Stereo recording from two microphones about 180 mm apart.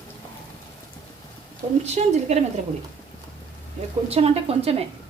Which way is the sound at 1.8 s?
35° right (ahead or behind).